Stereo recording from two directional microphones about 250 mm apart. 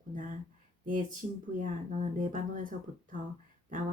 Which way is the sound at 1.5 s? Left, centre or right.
Right.